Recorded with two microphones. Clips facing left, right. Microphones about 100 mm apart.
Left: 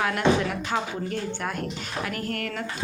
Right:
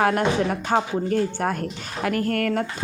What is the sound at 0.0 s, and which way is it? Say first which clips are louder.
Speech: right 3 dB; 40° right (ahead or behind).